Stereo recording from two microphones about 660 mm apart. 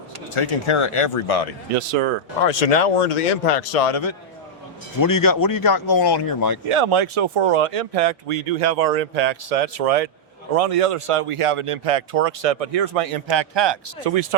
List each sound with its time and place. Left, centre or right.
0.3 s speech: left
2.5 s speech: left
4.9 s speech: left
6.7 s speech: right
14.0 s speech: right